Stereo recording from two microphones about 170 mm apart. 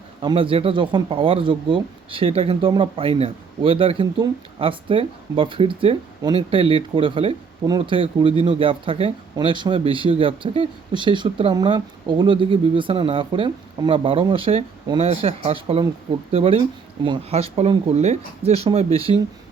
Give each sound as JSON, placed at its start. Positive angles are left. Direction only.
{"t": 0.2, "sound": "speech", "side_deg": -30}